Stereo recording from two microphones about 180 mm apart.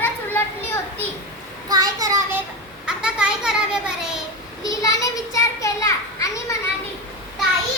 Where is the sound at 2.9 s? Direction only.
5° right (ahead or behind).